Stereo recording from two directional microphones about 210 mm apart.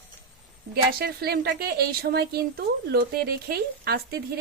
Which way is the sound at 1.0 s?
50° right (ahead or behind).